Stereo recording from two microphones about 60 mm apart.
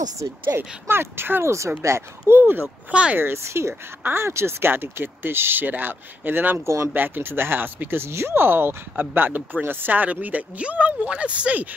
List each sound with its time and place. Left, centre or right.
0.5 s speech: right
1.8 s speech: right
2.6 s speech: centre
3.2 s speech: right
6.6 s speech: right
6.9 s speech: right
8.1 s speech: right